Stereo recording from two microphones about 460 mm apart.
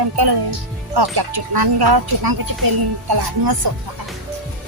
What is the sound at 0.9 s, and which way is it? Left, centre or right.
Speech, right.